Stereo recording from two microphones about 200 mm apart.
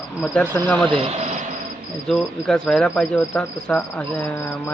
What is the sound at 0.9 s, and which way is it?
Speech, 30° right (ahead or behind).